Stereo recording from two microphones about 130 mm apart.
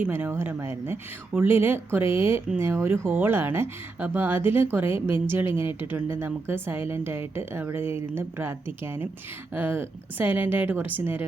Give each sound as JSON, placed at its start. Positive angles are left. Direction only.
{"t": 0.0, "sound": "a woman's voice", "side_deg": -15}